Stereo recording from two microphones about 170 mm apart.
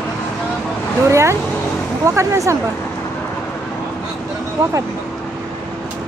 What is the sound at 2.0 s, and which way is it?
Speech, 20° right (ahead or behind).